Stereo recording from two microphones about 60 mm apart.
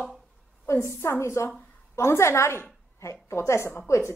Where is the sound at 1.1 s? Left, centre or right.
Left.